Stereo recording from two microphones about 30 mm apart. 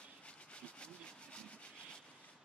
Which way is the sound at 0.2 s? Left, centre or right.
Left.